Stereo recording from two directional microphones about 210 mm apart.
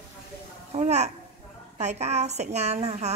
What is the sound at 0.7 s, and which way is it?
A woman's voice, 30° right (ahead or behind).